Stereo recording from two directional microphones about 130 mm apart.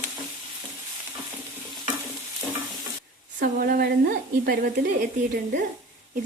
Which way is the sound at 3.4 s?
90° right.